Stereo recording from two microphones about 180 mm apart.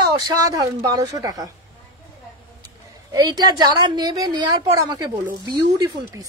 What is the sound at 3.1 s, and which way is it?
A woman's voice, 20° right (ahead or behind).